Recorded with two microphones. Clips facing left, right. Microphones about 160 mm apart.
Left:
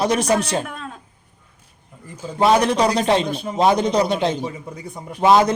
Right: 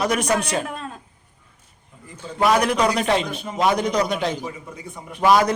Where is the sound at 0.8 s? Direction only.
Centre (ahead or behind).